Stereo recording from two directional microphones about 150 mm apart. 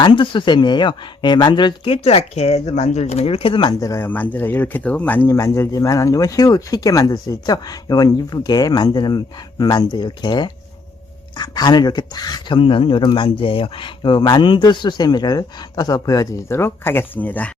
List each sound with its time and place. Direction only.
0.0 s speech: 35° left (ahead or behind); by 17.5 s 10° left (ahead or behind)